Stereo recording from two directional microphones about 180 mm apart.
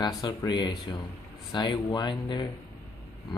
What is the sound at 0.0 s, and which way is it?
Speech, 25° left (ahead or behind).